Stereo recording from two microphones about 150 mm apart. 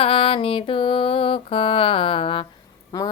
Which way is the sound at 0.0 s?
35° left (ahead or behind).